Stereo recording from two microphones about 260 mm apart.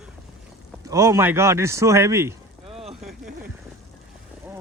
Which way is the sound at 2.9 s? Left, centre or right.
Centre.